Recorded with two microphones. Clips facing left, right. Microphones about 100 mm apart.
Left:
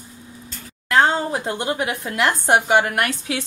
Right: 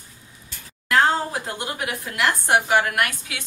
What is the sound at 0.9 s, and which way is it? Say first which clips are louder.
A woman's voice: left 2 dB; 25° left (ahead or behind).